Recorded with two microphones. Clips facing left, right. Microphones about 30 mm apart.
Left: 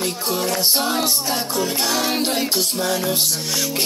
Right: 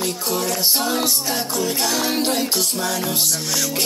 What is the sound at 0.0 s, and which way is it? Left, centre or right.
Music, centre.